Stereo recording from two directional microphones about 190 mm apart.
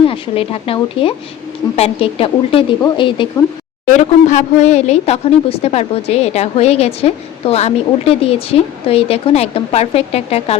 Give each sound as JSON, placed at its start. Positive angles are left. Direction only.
{"t": 0.0, "sound": "speech", "side_deg": 30}
{"t": 3.9, "sound": "a woman's voice", "side_deg": 40}